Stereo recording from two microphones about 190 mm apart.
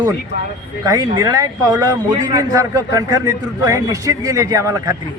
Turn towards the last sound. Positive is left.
turn(degrees=-15)  # may be behind; listen again after turning